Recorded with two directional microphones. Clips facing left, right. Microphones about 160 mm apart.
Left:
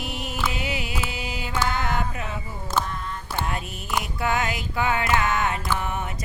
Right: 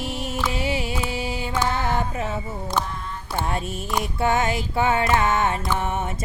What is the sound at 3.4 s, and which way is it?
Mantra, 30° right (ahead or behind).